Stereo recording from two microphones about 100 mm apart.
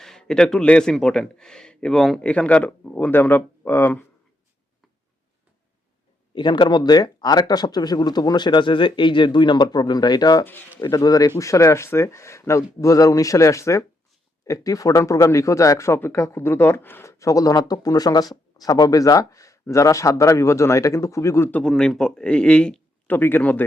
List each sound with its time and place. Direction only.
0.0 s speech: 5° left (ahead or behind); by 4.0 s 20° left (ahead or behind)
6.3 s speech: 50° left (ahead or behind); by 21.5 s 30° left (ahead or behind)
21.5 s speech: 5° left (ahead or behind)
23.1 s speech: 20° left (ahead or behind)